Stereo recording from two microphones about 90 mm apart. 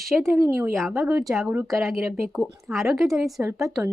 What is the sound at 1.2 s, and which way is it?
A woman's voice, centre (ahead or behind).